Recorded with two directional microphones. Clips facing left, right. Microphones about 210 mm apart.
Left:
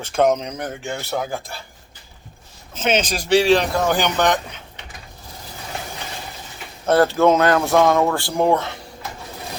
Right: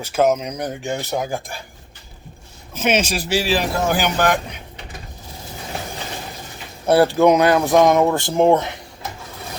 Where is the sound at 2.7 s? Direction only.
10° right (ahead or behind).